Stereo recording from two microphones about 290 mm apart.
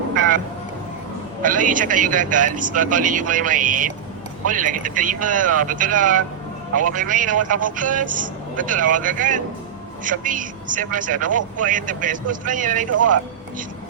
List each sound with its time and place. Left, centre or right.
1.4 s a man's voice: right
12.9 s speech: right